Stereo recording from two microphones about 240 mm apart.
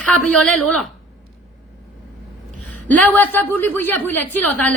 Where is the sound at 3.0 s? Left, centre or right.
Centre.